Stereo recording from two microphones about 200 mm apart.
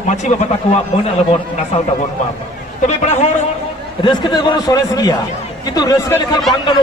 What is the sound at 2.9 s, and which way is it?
Speech, 35° left (ahead or behind).